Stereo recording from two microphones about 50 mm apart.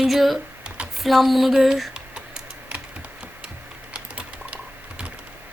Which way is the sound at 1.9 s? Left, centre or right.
Right.